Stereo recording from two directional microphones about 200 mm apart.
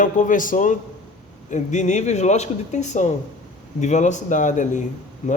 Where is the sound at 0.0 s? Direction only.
40° left (ahead or behind).